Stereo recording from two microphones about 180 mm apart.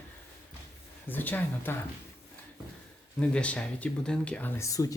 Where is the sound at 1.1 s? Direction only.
10° left (ahead or behind).